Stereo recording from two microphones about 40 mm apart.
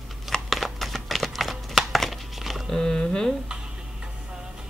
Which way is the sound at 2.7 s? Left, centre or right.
Centre.